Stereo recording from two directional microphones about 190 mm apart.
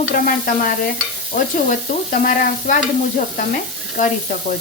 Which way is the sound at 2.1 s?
45° left (ahead or behind).